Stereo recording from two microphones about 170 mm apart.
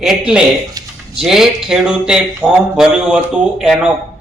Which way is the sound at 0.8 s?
20° right (ahead or behind).